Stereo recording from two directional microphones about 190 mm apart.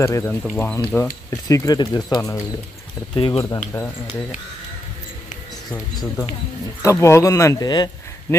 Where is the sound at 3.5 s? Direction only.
15° left (ahead or behind).